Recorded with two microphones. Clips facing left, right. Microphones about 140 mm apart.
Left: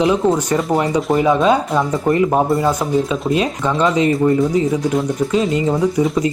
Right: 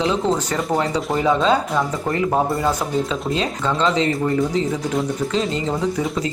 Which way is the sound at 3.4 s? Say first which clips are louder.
Left 3 dB; 15° left (ahead or behind).